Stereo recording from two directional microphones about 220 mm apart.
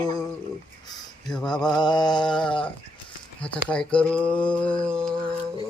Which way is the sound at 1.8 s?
20° left (ahead or behind).